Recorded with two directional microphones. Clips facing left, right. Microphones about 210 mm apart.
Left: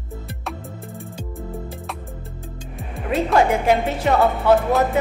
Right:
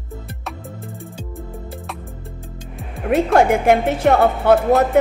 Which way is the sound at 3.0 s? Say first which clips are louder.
Right 3 dB; 50° right (ahead or behind).